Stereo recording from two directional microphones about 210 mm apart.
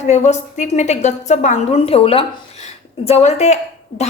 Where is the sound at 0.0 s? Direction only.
35° left (ahead or behind).